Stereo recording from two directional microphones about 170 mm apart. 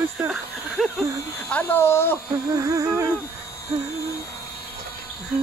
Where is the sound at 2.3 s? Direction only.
20° right (ahead or behind).